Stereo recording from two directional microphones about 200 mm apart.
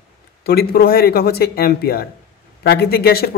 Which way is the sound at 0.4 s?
50° left (ahead or behind).